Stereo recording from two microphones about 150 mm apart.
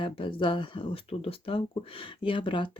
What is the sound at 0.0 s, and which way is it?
Speech, 35° left (ahead or behind).